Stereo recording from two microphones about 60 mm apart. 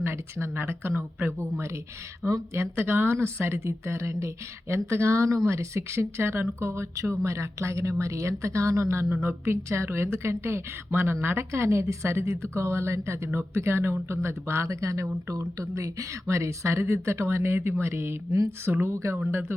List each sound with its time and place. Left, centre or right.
0.0 s a woman's voice: right
6.9 s speech: right
7.2 s speech: right
9.2 s a woman's voice: right
19.3 s speech: right